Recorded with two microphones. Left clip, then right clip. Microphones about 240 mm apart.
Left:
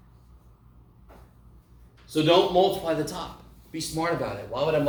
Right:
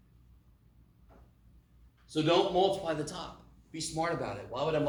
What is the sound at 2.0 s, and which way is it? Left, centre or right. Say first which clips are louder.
A man's voice: left 7 dB; centre.